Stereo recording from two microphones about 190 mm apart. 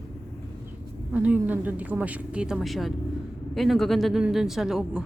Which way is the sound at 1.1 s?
10° right (ahead or behind).